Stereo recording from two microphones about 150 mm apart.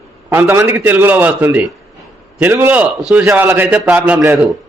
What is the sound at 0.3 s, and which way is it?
A man's voice, 15° right (ahead or behind).